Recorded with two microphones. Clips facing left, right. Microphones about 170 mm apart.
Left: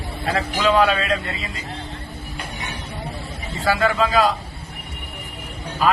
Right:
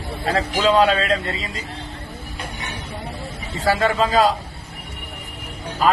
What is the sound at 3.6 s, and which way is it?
Speech, 35° right (ahead or behind).